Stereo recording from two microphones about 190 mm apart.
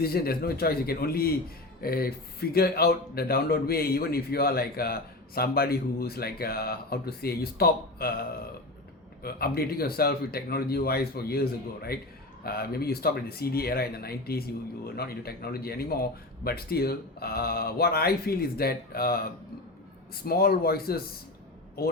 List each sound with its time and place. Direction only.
0.0 s speech: 55° left (ahead or behind)
9.2 s speech: 55° left (ahead or behind)